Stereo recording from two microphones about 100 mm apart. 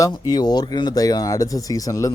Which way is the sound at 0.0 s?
40° left (ahead or behind).